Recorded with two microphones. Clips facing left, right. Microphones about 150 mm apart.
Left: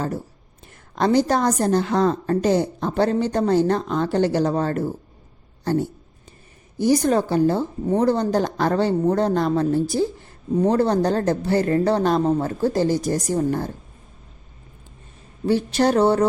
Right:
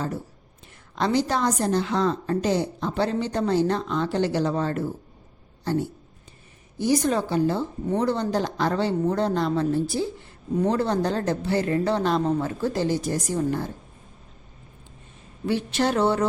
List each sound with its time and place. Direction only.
0.9 s a woman's voice: 45° left (ahead or behind)
15.4 s a woman's voice: 40° left (ahead or behind)